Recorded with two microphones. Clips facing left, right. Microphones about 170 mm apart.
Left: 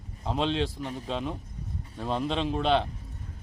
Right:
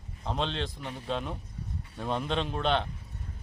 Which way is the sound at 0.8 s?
40° left (ahead or behind).